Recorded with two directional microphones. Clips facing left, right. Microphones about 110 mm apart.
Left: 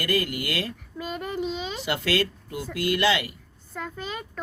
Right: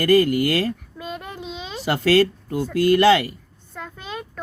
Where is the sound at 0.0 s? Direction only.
40° right (ahead or behind).